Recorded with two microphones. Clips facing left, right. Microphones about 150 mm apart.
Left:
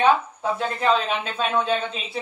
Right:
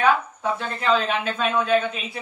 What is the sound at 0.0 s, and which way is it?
Speech, 25° left (ahead or behind).